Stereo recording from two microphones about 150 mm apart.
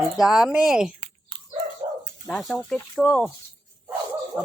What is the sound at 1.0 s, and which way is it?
Dog, 35° right (ahead or behind).